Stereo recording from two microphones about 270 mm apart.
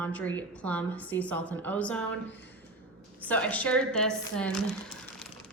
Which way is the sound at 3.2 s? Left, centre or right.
Centre.